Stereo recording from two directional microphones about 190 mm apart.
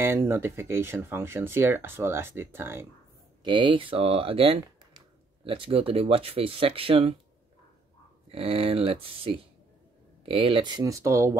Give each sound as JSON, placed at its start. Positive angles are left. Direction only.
{"t": 0.0, "sound": "speech", "side_deg": -15}
{"t": 3.4, "sound": "speech", "side_deg": -25}
{"t": 8.3, "sound": "speech", "side_deg": -30}